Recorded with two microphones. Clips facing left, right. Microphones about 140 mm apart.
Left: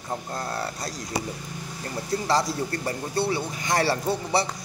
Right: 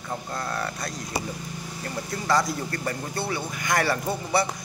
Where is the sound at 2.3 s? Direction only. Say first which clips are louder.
Right 1 dB; 30° left (ahead or behind).